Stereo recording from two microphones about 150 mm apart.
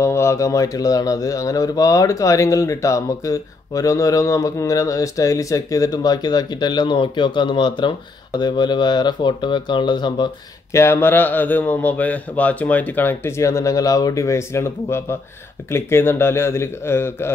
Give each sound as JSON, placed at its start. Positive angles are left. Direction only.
{"t": 0.0, "sound": "speech", "side_deg": 20}
{"t": 10.7, "sound": "a man's voice", "side_deg": 15}